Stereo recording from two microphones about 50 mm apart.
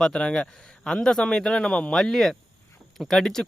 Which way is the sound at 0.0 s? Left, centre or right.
Centre.